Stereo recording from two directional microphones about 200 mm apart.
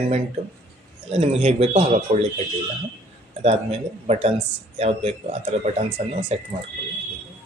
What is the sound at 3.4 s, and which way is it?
Speech, 30° right (ahead or behind).